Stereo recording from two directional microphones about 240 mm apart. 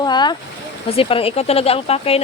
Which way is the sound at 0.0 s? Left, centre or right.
Centre.